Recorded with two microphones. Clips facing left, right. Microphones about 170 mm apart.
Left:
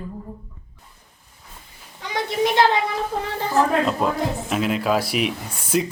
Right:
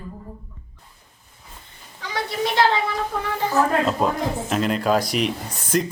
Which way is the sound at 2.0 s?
20° left (ahead or behind).